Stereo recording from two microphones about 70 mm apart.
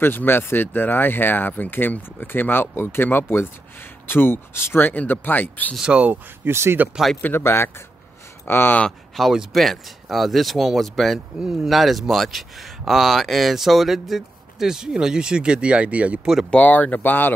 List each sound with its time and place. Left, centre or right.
0.0 s speech: left
5.8 s speech: centre
6.4 s speech: right
7.2 s speech: left
9.1 s speech: centre
16.4 s speech: left